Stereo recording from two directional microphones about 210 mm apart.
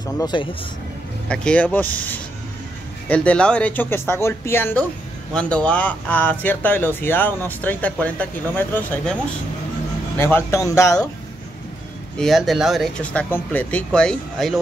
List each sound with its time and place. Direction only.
0.0 s speech: 20° left (ahead or behind)
1.3 s speech: 5° left (ahead or behind)
10.1 s speech: 10° left (ahead or behind)
12.2 s speech: centre (ahead or behind)